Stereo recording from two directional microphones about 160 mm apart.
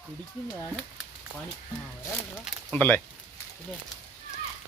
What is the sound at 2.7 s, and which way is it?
Speech, 10° left (ahead or behind).